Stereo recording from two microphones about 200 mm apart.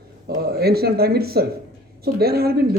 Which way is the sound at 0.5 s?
50° right (ahead or behind).